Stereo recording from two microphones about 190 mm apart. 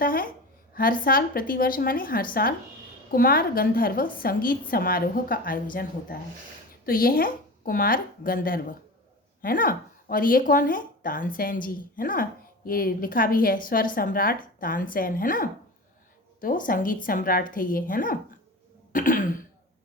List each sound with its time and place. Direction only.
0.0 s a woman's voice: 50° left (ahead or behind)